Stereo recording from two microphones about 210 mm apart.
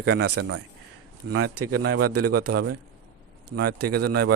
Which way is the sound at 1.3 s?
90° right.